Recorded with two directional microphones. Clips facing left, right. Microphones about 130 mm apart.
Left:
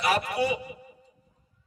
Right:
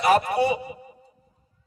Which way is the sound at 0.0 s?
40° right (ahead or behind).